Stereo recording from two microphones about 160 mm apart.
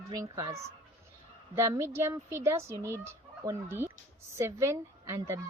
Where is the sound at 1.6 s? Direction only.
15° right (ahead or behind).